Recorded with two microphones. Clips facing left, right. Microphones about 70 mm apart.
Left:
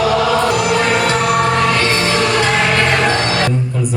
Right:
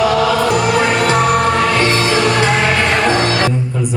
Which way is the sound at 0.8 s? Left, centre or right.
Centre.